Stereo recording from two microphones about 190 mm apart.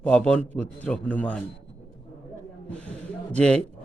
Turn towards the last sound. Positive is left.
turn(degrees=5)  # may be behind; listen again after turning